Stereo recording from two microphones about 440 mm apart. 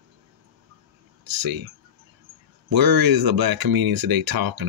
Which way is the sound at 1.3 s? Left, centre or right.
Right.